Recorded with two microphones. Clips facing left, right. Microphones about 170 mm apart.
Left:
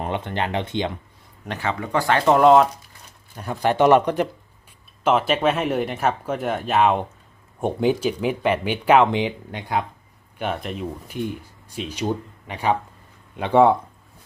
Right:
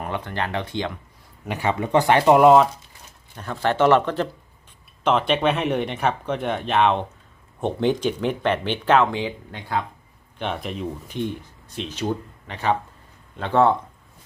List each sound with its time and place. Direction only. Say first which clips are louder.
0.0 s speech: left 2 dB; 20° left (ahead or behind)
1.5 s speech: right 3 dB; 15° right (ahead or behind)
3.3 s speech: left 2 dB; 15° left (ahead or behind)
10.3 s speech: left 1 dB; 5° left (ahead or behind)